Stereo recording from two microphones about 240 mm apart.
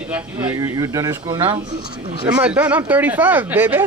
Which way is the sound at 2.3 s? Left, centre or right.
Centre.